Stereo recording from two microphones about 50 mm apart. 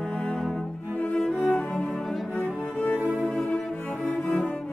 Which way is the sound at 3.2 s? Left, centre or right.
Centre.